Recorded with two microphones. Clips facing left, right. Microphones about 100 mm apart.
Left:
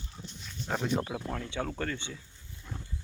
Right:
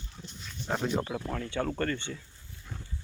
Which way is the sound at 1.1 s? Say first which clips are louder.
Right 2 dB; 5° left (ahead or behind).